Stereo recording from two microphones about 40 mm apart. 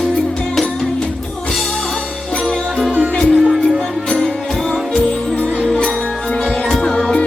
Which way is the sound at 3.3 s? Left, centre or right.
Centre.